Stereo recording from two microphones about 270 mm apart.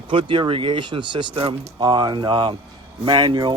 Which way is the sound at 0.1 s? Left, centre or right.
Centre.